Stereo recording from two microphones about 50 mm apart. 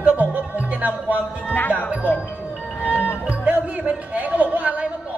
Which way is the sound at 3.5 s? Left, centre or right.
Right.